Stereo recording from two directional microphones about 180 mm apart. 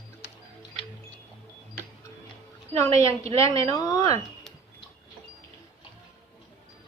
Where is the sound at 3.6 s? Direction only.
20° left (ahead or behind).